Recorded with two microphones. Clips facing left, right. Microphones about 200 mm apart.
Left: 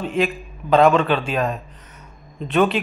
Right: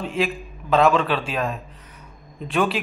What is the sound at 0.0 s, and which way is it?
A man's voice, 5° right (ahead or behind).